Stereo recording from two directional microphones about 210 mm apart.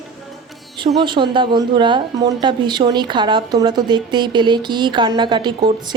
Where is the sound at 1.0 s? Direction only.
20° right (ahead or behind).